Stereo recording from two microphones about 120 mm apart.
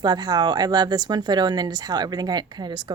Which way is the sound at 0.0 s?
35° right (ahead or behind).